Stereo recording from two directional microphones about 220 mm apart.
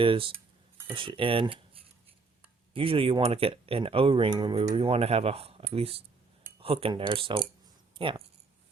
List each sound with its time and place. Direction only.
0.0 s speech: 25° right (ahead or behind)
2.7 s speech: 25° right (ahead or behind)